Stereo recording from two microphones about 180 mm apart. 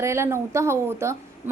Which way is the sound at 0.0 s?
15° right (ahead or behind).